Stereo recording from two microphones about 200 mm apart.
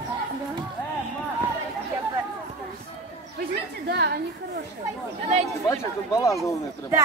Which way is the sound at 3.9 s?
55° right (ahead or behind).